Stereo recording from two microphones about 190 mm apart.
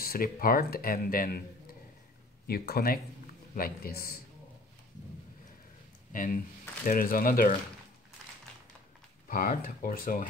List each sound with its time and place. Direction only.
0.0 s speech: 50° left (ahead or behind)
6.1 s speech: 45° left (ahead or behind)
9.3 s speech: 45° left (ahead or behind)